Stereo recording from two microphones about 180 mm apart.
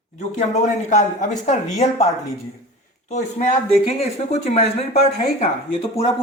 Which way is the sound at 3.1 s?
40° left (ahead or behind).